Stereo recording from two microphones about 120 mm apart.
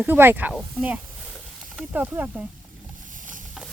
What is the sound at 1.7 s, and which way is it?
Speech, 10° right (ahead or behind).